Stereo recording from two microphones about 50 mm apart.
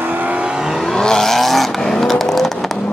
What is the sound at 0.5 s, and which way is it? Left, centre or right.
Vehicle, centre.